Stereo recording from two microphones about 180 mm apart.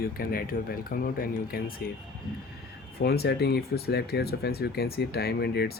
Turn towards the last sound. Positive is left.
turn(degrees=60)  # may be behind; listen again after turning